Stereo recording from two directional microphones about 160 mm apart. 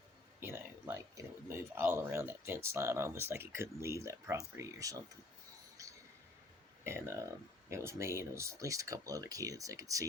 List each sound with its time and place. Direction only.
0.3 s speech: 15° right (ahead or behind)
6.8 s speech: 15° right (ahead or behind)